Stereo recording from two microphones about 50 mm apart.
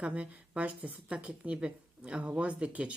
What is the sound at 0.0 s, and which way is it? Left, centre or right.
Speech, right.